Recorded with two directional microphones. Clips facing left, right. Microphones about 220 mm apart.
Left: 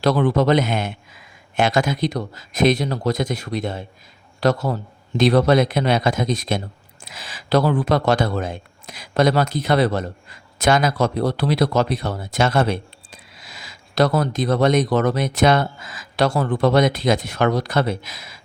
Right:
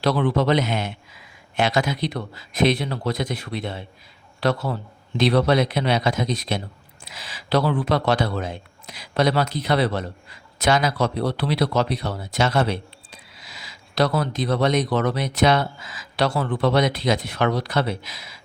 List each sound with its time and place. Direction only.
0.0 s a man's voice: 45° left (ahead or behind)